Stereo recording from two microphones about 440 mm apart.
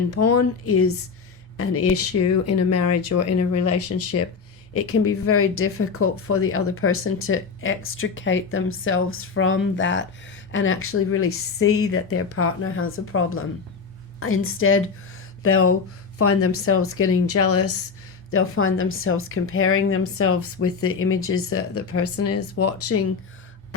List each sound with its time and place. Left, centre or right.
0.1 s speech: left